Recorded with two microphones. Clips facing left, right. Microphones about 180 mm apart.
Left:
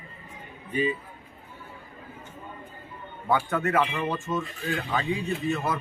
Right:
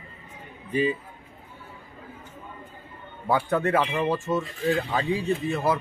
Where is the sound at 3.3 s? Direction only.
35° right (ahead or behind).